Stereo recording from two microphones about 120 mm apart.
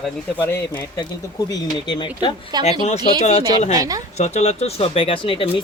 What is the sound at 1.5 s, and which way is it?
Speech, 40° left (ahead or behind).